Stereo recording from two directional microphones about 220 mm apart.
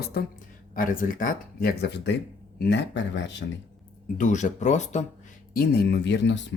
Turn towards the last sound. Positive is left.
turn(degrees=55)  # may be behind; listen again after turning